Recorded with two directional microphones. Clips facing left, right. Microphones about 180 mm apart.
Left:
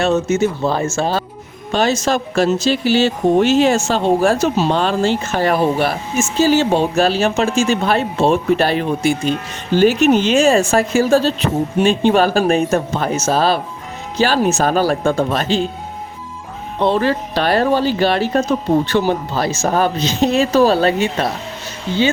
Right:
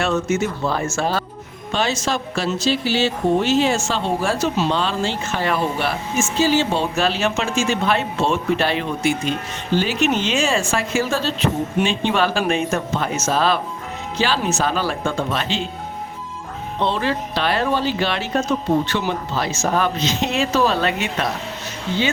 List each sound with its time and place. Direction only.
0.2 s speech: 25° left (ahead or behind)
1.7 s speech: 40° left (ahead or behind)
16.8 s speech: 45° left (ahead or behind)